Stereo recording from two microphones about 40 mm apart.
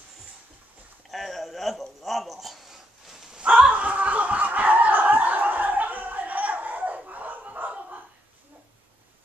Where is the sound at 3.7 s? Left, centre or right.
Right.